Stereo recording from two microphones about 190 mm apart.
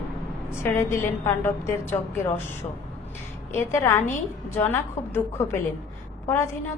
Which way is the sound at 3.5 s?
15° left (ahead or behind).